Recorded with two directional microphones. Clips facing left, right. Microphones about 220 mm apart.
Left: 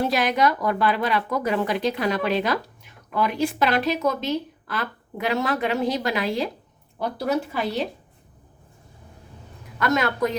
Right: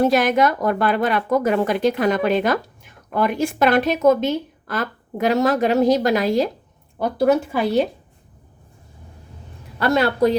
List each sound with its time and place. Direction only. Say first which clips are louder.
0.0 s a woman's voice: right 5 dB; 50° right (ahead or behind)
7.2 s a woman's voice: right 8 dB; 50° right (ahead or behind)
9.7 s a woman's voice: right 4 dB; 30° right (ahead or behind)